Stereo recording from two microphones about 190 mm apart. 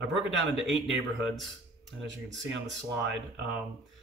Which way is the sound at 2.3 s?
70° right (ahead or behind).